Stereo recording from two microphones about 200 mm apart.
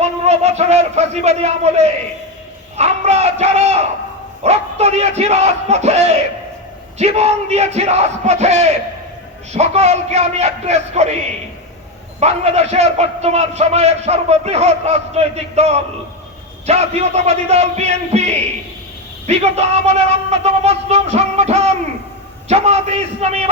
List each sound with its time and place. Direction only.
0.0 s a man's voice: 35° right (ahead or behind)
12.2 s a man's voice: 35° right (ahead or behind)